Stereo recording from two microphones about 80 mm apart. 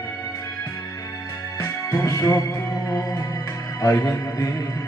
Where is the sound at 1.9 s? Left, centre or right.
Left.